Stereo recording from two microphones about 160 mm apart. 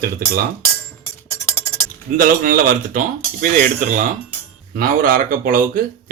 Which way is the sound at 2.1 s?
60° right (ahead or behind).